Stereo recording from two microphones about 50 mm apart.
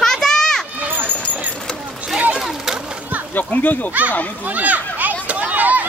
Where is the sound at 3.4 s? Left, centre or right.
Left.